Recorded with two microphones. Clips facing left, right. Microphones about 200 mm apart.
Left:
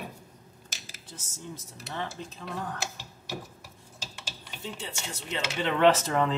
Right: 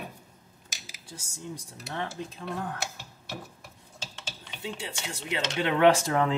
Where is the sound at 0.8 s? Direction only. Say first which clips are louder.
Right 4 dB; 10° right (ahead or behind).